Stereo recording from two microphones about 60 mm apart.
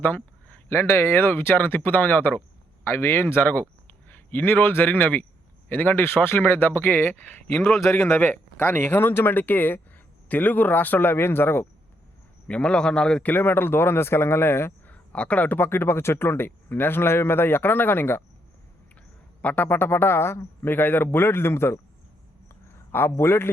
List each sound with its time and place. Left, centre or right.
0.0 s a sound: left
0.8 s speech: left
7.7 s speech: centre
7.9 s speech: left
12.5 s a man's voice: centre
13.2 s speech: left
14.8 s speech: left
19.4 s speech: left
19.6 s speech: left
22.9 s speech: left